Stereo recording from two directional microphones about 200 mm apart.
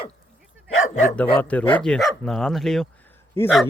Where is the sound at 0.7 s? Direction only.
80° left.